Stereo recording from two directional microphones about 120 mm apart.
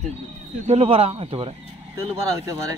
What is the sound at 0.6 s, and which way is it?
Speech, 60° right (ahead or behind).